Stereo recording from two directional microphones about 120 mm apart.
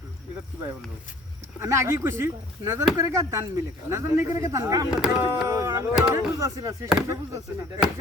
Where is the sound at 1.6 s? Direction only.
25° right (ahead or behind).